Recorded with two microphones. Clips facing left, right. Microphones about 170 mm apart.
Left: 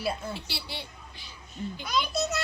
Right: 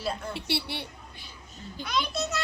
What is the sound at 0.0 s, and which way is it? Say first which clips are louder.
Speech: left 1 dB; 10° left (ahead or behind).